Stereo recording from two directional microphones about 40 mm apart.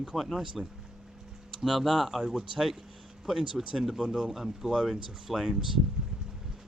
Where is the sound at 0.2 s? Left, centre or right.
Centre.